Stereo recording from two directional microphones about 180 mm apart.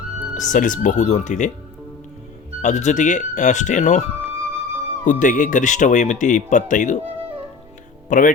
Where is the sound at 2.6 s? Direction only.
40° left (ahead or behind).